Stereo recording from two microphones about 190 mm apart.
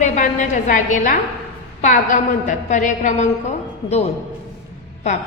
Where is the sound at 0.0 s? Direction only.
40° left (ahead or behind).